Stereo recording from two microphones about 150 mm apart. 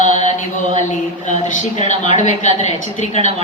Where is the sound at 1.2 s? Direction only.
55° left (ahead or behind).